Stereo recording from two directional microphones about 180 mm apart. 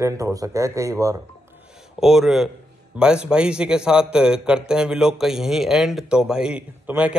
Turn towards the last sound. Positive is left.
turn(degrees=-5)  # may be behind; listen again after turning